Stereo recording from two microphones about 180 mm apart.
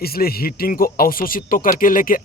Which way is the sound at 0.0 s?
55° left (ahead or behind).